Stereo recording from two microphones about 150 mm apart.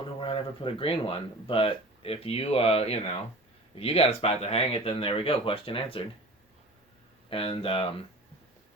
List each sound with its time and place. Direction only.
0.0 s speech: 35° left (ahead or behind)
7.3 s speech: 40° left (ahead or behind)